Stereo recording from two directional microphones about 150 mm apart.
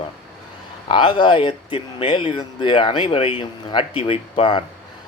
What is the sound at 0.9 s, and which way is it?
Speech, 30° left (ahead or behind).